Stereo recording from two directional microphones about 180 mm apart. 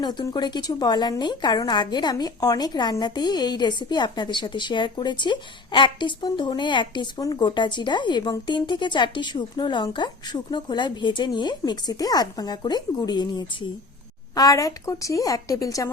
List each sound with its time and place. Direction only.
0.0 s a woman's voice: 25° left (ahead or behind)